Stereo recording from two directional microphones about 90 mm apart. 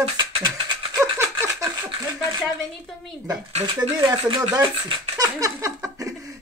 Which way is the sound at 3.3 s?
50° right (ahead or behind).